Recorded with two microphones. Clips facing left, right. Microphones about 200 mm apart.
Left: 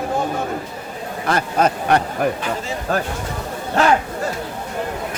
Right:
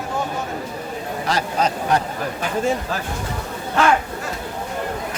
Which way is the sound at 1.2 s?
55° left (ahead or behind).